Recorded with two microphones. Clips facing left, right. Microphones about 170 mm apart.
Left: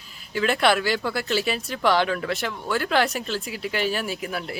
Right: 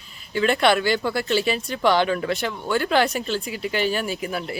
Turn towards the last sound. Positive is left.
turn(degrees=0)  # may be behind; listen again after turning